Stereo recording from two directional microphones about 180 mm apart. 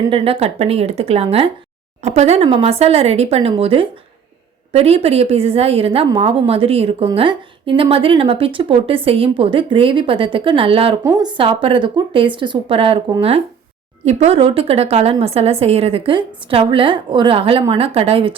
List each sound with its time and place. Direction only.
0.1 s a woman's voice: 35° right (ahead or behind)